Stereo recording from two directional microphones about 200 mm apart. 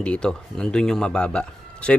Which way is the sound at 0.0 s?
5° left (ahead or behind).